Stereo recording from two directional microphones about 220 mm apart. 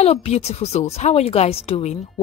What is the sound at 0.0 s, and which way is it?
Speech, 30° left (ahead or behind).